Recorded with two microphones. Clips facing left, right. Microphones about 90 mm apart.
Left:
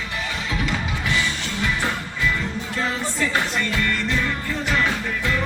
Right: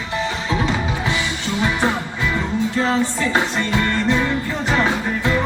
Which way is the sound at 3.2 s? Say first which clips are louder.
Right 3 dB; 30° right (ahead or behind).